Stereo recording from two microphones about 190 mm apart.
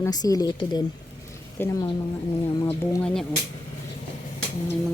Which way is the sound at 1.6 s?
10° left (ahead or behind).